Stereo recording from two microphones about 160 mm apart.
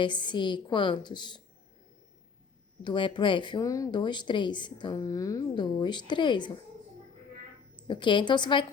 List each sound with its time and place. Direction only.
0.0 s speech: 30° left (ahead or behind)
2.8 s speech: 30° left (ahead or behind)
7.8 s speech: 30° left (ahead or behind)